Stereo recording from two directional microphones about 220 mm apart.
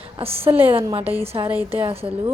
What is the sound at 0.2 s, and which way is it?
A woman's voice, 25° right (ahead or behind).